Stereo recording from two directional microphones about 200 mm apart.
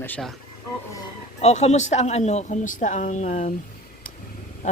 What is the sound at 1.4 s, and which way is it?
Speech, 35° left (ahead or behind).